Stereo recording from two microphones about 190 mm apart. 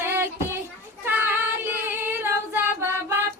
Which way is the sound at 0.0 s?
10° right (ahead or behind).